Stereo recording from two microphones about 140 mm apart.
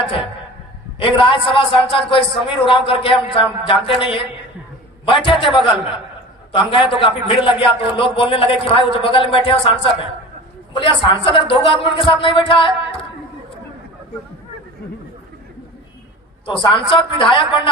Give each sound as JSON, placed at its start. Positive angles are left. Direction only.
{"t": 0.0, "sound": "a man's voice", "side_deg": 40}
{"t": 5.2, "sound": "a man's voice", "side_deg": 40}
{"t": 16.5, "sound": "a man's voice", "side_deg": 40}